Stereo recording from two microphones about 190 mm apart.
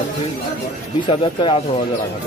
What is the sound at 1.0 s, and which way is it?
Speech, 25° left (ahead or behind).